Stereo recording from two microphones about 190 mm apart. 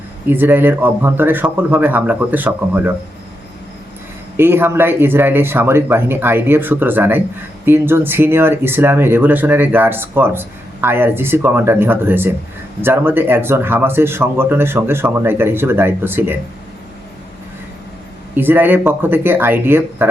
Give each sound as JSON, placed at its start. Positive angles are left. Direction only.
{"t": 0.3, "sound": "speech", "side_deg": -10}
{"t": 4.4, "sound": "speech", "side_deg": -10}
{"t": 18.3, "sound": "speech", "side_deg": -10}